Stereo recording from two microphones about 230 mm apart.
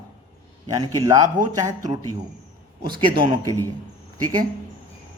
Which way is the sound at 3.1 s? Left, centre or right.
Centre.